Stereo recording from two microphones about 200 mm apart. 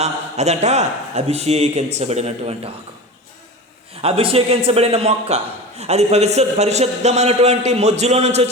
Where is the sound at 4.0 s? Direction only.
30° right (ahead or behind).